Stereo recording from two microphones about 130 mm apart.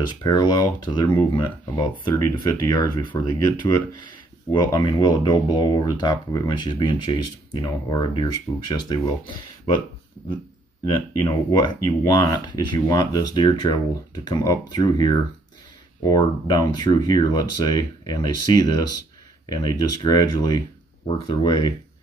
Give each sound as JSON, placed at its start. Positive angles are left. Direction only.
{"t": 0.2, "sound": "speech", "side_deg": 30}
{"t": 11.2, "sound": "speech", "side_deg": 35}